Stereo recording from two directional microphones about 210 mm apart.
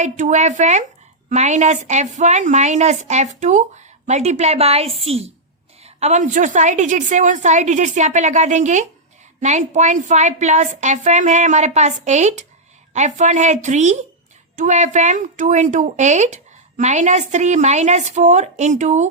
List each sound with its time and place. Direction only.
0.0 s speech: 35° right (ahead or behind)